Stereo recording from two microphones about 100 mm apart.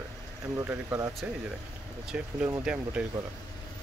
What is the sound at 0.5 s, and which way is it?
Speech, 25° right (ahead or behind).